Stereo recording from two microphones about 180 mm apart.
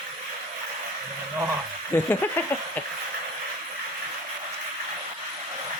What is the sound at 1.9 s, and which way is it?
Speech, 15° left (ahead or behind).